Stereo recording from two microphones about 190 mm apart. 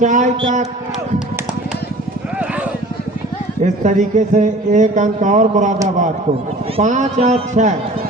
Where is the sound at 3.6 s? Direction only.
40° right (ahead or behind).